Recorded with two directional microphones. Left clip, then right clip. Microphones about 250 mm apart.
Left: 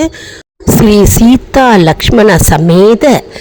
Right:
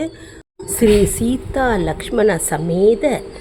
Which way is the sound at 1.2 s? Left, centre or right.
Left.